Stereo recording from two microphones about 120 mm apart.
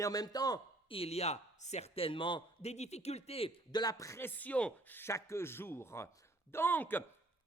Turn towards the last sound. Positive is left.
turn(degrees=15)  # may be behind; listen again after turning